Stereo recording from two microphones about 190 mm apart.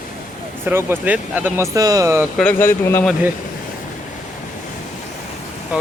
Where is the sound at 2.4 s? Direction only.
10° left (ahead or behind).